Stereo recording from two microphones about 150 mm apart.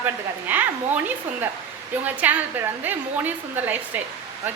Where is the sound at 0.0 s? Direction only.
10° right (ahead or behind).